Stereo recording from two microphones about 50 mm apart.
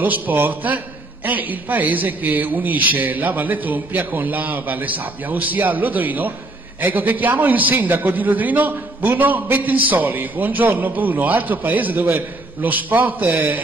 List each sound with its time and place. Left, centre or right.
0.0 s a man's voice: right